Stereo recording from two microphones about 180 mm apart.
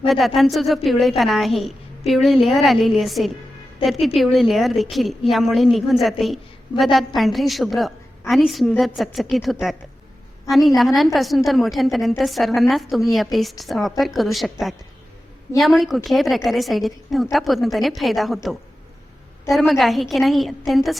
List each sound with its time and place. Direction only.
0.1 s a woman's voice: centre (ahead or behind)
10.8 s a woman's voice: centre (ahead or behind)
19.5 s a woman's voice: centre (ahead or behind)